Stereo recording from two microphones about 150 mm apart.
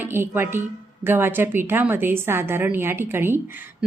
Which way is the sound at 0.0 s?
15° right (ahead or behind).